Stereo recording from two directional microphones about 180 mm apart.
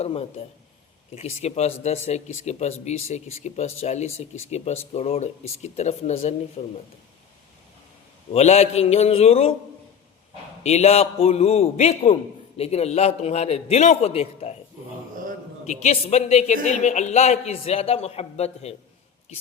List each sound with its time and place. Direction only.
0.0 s a man's voice: 35° left (ahead or behind)
8.3 s a man's voice: 35° left (ahead or behind)
10.6 s a man's voice: 35° left (ahead or behind)
15.6 s a man's voice: 40° left (ahead or behind)